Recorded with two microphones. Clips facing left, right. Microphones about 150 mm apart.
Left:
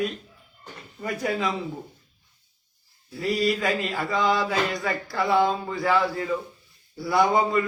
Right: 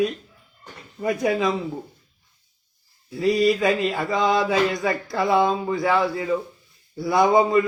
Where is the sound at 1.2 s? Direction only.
25° right (ahead or behind).